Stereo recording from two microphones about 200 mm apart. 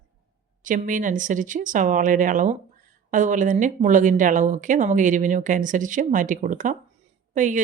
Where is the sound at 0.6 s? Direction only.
40° right (ahead or behind).